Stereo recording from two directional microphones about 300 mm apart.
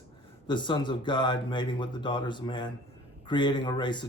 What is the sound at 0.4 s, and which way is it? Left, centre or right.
Speech, centre.